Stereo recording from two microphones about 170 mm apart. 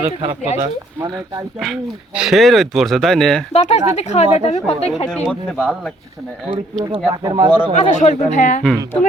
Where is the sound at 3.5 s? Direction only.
40° left (ahead or behind).